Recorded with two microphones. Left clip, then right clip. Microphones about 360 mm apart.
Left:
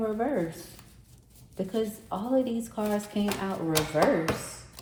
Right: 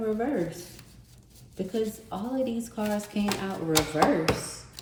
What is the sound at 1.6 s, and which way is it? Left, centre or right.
Speech, centre.